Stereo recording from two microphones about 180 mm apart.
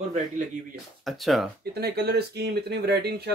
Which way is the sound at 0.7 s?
Centre (ahead or behind).